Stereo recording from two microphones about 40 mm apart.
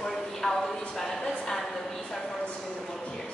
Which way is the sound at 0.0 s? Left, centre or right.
Centre.